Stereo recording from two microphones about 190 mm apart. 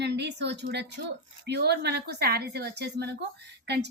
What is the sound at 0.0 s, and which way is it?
A woman's voice, 60° right (ahead or behind).